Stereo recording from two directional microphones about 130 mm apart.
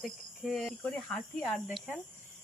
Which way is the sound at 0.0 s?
Centre (ahead or behind).